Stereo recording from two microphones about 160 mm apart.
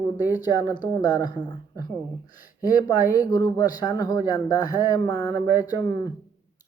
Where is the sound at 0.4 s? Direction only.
25° left (ahead or behind).